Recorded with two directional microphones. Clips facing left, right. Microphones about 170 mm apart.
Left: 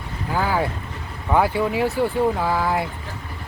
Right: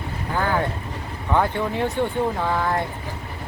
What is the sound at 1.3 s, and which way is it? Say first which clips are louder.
Speech: left 2 dB; 5° left (ahead or behind).